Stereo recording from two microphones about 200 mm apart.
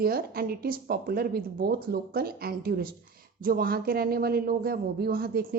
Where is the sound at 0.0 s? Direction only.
50° right (ahead or behind).